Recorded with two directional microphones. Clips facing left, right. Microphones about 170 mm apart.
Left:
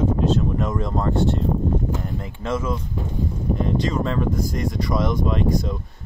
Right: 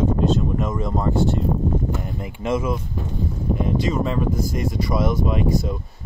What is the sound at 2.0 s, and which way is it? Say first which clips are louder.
Speech: right 1 dB; 15° right (ahead or behind).